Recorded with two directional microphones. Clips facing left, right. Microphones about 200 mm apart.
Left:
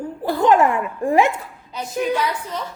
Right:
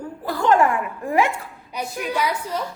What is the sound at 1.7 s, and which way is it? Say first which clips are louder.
Speech: right 1 dB; 15° right (ahead or behind).